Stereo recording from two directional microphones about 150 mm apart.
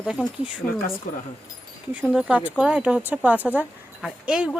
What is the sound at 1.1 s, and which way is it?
Speech, 60° left (ahead or behind).